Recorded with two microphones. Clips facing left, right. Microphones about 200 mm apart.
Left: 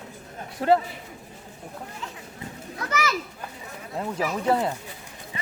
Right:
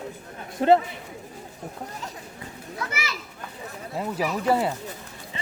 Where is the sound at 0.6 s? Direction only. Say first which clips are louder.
Right 2 dB; 25° right (ahead or behind).